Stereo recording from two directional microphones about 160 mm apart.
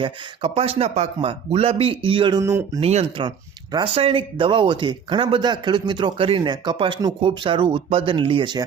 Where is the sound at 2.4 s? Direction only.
20° right (ahead or behind).